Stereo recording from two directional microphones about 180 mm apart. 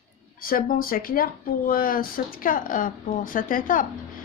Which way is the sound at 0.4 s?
50° left (ahead or behind).